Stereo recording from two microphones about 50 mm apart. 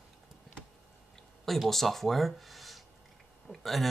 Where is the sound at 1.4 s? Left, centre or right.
Centre.